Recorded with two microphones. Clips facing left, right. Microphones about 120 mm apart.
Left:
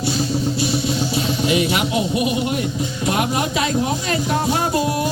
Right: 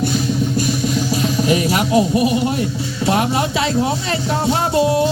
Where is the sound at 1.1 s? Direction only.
40° right (ahead or behind).